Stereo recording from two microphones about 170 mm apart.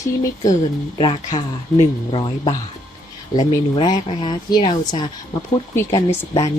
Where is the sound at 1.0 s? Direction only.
30° left (ahead or behind).